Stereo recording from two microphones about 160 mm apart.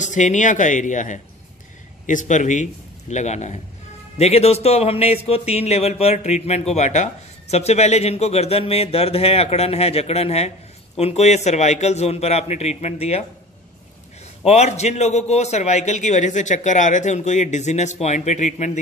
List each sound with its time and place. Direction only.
0.0 s a man's voice: 50° left (ahead or behind)
14.4 s a man's voice: 40° left (ahead or behind)